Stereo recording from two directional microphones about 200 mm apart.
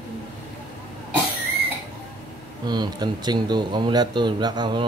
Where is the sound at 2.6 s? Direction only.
20° right (ahead or behind).